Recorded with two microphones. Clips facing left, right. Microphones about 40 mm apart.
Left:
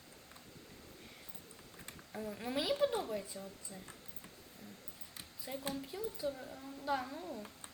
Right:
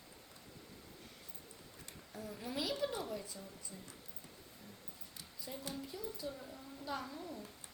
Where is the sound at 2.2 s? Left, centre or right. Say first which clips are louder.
Left 4 dB; left.